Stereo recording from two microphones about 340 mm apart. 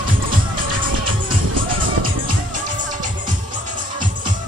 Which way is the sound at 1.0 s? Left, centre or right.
Right.